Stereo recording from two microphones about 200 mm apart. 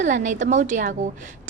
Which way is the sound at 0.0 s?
40° right (ahead or behind).